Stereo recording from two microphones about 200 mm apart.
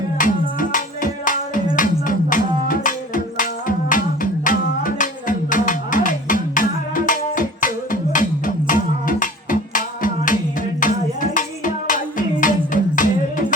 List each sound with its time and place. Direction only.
0.2 s music: 40° left (ahead or behind)